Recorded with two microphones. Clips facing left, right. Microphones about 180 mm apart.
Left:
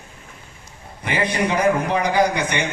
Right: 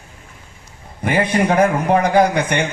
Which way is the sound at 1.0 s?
50° right (ahead or behind).